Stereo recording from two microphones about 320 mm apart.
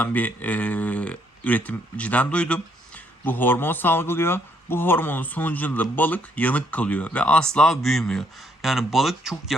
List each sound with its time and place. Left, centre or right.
0.0 s speech: centre